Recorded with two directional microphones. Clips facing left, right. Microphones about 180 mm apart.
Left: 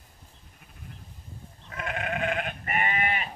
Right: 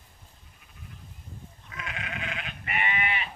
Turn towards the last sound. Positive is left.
turn(degrees=45)  # may be behind; listen again after turning